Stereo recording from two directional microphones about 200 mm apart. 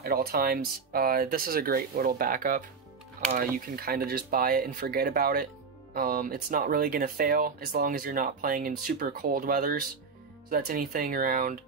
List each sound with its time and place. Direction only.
0.0 s speech: 50° right (ahead or behind)